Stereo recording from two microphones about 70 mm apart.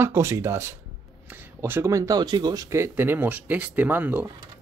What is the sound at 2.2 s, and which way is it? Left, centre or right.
Speech, right.